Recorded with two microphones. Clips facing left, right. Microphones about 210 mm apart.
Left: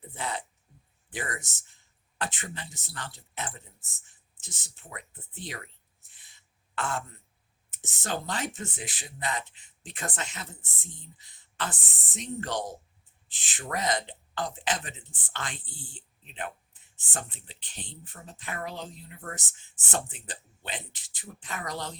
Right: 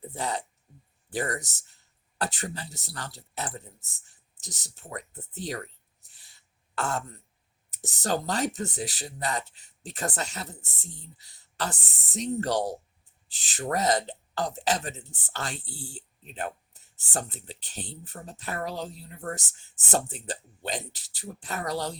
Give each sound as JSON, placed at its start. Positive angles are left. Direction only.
{"t": 0.1, "sound": "speech", "side_deg": -40}